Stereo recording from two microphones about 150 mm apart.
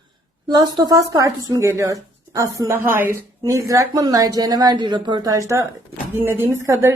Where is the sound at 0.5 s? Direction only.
25° right (ahead or behind).